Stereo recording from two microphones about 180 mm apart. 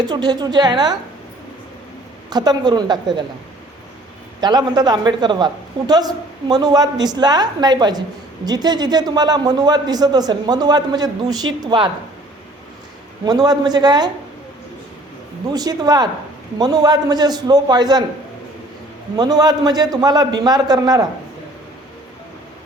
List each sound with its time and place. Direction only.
0.0 s a man's voice: 20° right (ahead or behind)
2.3 s a man's voice: 20° right (ahead or behind)
4.4 s a man's voice: 25° right (ahead or behind)
13.2 s a man's voice: 20° right (ahead or behind)
15.5 s a man's voice: 20° right (ahead or behind)
19.1 s a man's voice: 20° right (ahead or behind)